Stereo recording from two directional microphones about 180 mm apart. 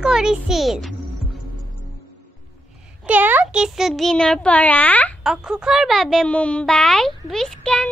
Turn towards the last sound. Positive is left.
turn(degrees=5)  # may be behind; listen again after turning